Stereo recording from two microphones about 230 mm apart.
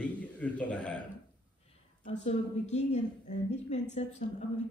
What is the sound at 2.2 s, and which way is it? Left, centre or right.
A woman's voice, left.